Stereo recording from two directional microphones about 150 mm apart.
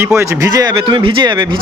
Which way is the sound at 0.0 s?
20° right (ahead or behind).